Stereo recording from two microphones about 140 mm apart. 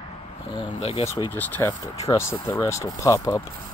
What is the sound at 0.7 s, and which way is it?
Speech, 45° left (ahead or behind).